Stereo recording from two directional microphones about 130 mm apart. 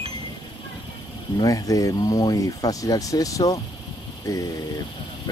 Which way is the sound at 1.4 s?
25° left (ahead or behind).